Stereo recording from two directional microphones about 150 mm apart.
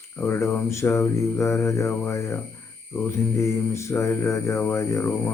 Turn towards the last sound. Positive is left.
turn(degrees=15)  # may be behind; listen again after turning